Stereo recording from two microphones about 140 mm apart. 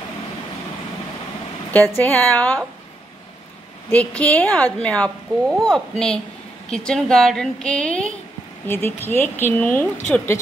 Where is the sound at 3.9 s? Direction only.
10° left (ahead or behind).